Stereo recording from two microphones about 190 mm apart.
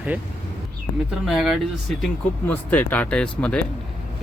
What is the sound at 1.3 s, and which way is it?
Speech, centre (ahead or behind).